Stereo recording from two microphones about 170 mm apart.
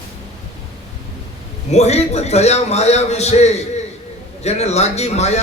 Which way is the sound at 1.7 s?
40° left (ahead or behind).